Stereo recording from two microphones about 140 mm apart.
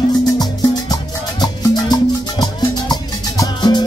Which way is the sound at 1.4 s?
30° left (ahead or behind).